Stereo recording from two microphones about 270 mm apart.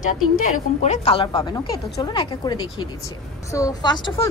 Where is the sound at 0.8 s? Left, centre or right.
Left.